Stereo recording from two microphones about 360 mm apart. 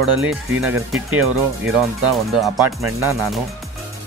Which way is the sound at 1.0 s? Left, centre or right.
Right.